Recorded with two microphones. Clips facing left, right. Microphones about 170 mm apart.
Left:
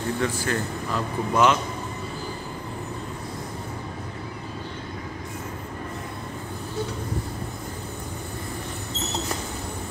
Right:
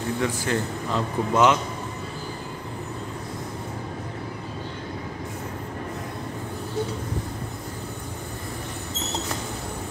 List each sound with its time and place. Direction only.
0.2 s a man's voice: 20° right (ahead or behind)